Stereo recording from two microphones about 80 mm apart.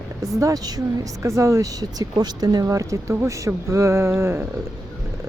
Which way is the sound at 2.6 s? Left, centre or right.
Right.